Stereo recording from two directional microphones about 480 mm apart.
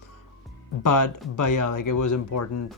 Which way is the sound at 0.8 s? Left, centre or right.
Left.